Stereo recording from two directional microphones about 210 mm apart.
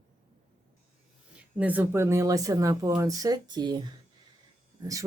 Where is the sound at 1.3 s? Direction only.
5° right (ahead or behind).